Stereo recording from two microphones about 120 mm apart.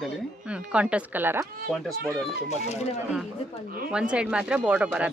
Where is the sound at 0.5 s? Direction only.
10° right (ahead or behind).